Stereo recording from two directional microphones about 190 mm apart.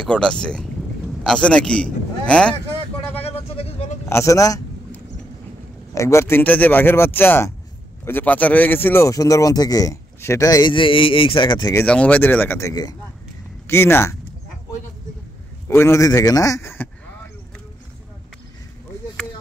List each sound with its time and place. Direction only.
0.0 s a man's voice: 5° left (ahead or behind)
3.2 s vehicle: 30° left (ahead or behind)
4.1 s a sound: 15° left (ahead or behind)
5.9 s a man's voice: 15° left (ahead or behind)
11.8 s a man's voice: 5° left (ahead or behind)
15.7 s a man's voice: 15° left (ahead or behind)